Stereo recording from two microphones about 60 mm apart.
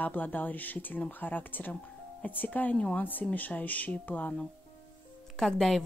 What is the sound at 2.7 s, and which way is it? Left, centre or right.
Speech, centre.